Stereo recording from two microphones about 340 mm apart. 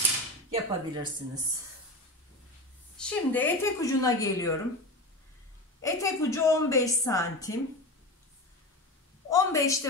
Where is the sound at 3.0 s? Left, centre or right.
Centre.